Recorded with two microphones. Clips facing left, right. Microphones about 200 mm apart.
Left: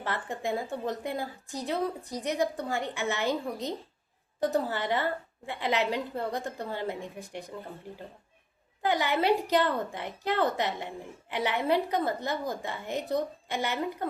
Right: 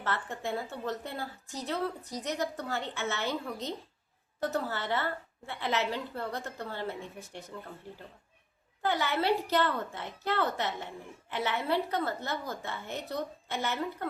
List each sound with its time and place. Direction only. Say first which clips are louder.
0.0 s a woman's voice: left 2 dB; 15° left (ahead or behind)
8.8 s a woman's voice: left 3 dB; 15° left (ahead or behind)